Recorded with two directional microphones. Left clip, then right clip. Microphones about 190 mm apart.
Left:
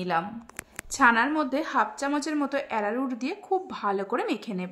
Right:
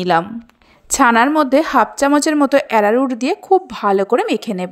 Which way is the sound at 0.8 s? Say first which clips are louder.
Right 9 dB; 45° right (ahead or behind).